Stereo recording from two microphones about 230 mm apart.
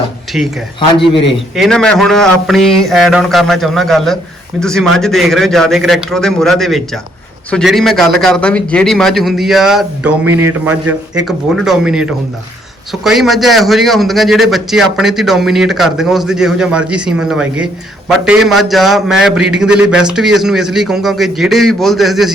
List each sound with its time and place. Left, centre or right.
0.3 s a man's voice: centre
0.9 s a man's voice: left
1.5 s a man's voice: centre